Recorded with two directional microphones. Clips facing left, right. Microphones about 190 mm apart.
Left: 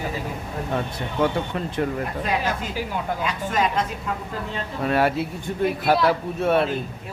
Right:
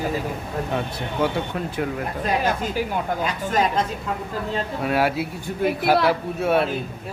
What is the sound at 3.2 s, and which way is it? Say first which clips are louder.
Speech: right 1 dB; 35° right (ahead or behind).